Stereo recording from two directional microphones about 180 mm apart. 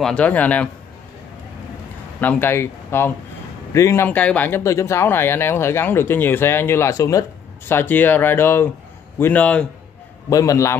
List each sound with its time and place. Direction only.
0.0 s speech: 5° left (ahead or behind)
2.1 s speech: 10° left (ahead or behind)
10.3 s speech: 20° left (ahead or behind)